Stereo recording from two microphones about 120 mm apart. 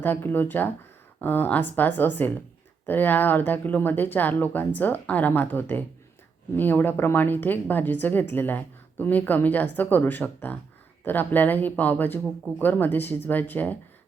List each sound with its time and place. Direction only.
0.0 s a woman's voice: 15° left (ahead or behind)